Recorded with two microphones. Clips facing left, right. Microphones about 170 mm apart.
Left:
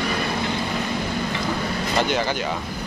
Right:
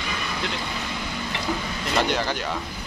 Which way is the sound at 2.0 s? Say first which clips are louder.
Left 2 dB; centre (ahead or behind).